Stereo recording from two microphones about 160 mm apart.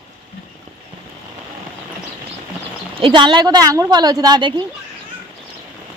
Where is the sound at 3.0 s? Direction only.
30° right (ahead or behind).